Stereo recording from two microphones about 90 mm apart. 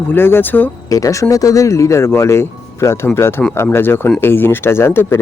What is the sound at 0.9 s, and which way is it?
Speech, 35° left (ahead or behind).